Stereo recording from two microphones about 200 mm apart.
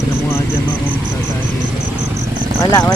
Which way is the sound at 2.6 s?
15° left (ahead or behind).